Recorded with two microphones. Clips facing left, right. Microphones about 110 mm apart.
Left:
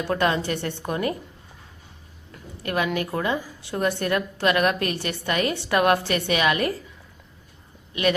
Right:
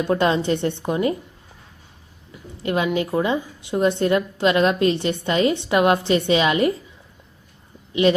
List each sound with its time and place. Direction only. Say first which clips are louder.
0.0 s a woman's voice: right 4 dB; 20° right (ahead or behind)
2.6 s a woman's voice: right 4 dB; 20° right (ahead or behind)